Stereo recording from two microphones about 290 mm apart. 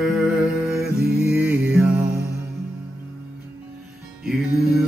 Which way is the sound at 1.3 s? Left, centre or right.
Centre.